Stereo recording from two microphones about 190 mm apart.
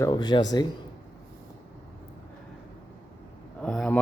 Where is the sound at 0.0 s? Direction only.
20° left (ahead or behind).